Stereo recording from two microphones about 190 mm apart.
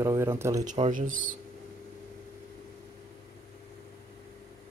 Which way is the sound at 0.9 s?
45° right (ahead or behind).